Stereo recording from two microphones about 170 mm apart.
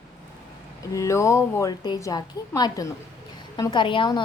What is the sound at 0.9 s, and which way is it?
A woman's voice, 15° left (ahead or behind).